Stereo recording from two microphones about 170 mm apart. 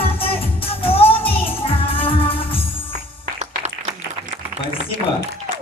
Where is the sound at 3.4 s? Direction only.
40° right (ahead or behind).